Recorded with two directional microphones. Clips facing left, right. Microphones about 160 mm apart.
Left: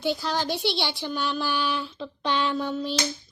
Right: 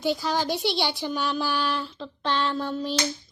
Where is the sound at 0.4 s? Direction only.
45° right (ahead or behind).